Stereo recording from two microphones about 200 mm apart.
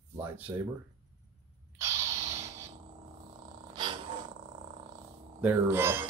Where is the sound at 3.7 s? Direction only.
25° right (ahead or behind).